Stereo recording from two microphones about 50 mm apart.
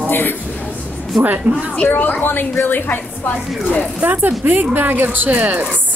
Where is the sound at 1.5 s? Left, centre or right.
Right.